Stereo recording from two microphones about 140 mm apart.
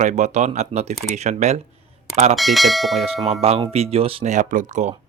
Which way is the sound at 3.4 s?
45° right (ahead or behind).